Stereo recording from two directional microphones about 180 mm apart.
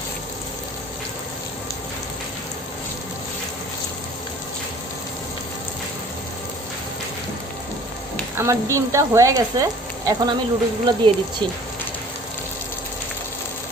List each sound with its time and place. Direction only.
8.4 s frying: 15° right (ahead or behind)
10.1 s speech: 20° right (ahead or behind)